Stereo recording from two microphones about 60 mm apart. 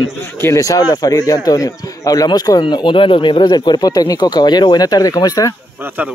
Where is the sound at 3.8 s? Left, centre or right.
Left.